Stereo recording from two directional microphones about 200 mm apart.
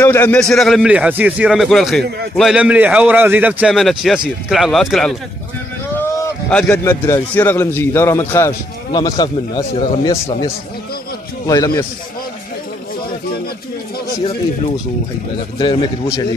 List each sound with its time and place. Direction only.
0.0 s a man's voice: 10° left (ahead or behind)
15.6 s speech: 20° left (ahead or behind)